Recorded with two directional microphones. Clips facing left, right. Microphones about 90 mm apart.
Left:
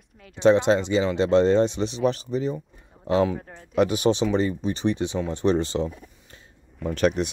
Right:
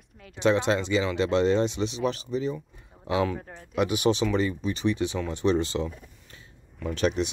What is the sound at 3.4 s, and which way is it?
Speech, centre (ahead or behind).